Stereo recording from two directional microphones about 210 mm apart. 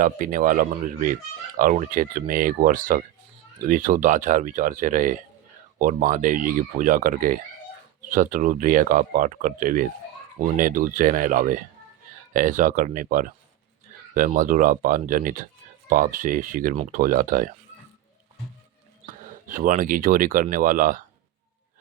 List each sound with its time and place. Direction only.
0.0 s speech: 40° right (ahead or behind)
19.0 s speech: 40° right (ahead or behind)